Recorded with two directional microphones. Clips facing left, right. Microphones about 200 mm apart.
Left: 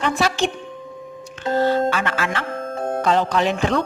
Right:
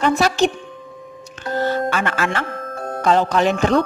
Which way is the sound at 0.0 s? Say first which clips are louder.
Right 4 dB; 40° right (ahead or behind).